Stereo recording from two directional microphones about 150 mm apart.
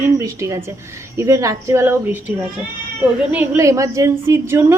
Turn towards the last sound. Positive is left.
turn(degrees=-20)  # may be behind; listen again after turning